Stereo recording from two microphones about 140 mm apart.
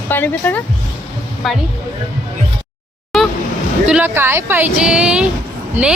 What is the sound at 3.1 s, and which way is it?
Vehicle, centre (ahead or behind).